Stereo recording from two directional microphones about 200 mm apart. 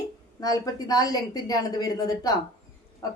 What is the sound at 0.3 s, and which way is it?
A woman's voice, 15° left (ahead or behind).